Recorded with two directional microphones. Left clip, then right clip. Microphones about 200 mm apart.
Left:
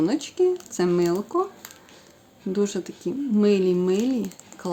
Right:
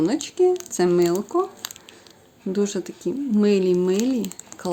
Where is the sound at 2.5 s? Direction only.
10° right (ahead or behind).